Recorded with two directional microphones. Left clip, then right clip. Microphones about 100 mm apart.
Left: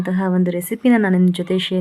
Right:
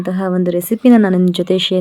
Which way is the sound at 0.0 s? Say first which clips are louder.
Right 3 dB; 25° right (ahead or behind).